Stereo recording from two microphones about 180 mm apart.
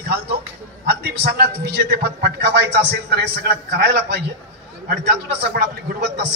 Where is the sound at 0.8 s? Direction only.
60° right (ahead or behind).